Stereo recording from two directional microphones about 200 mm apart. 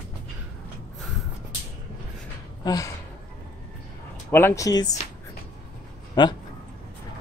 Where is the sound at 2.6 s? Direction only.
20° left (ahead or behind).